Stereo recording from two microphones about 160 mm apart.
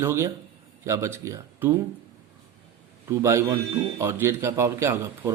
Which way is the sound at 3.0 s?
20° right (ahead or behind).